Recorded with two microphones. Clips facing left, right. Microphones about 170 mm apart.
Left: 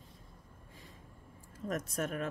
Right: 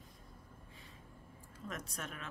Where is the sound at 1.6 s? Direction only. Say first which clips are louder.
Left 9 dB; 45° left (ahead or behind).